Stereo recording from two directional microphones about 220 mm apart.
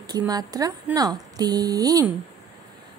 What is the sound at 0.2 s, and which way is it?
A woman's voice, 15° right (ahead or behind).